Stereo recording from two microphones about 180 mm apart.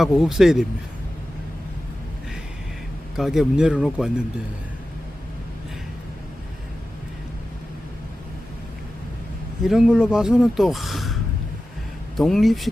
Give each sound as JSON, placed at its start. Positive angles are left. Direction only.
{"t": 0.0, "sound": "a man's voice", "side_deg": 0}
{"t": 3.2, "sound": "a man's voice", "side_deg": 0}
{"t": 9.6, "sound": "a man's voice", "side_deg": 0}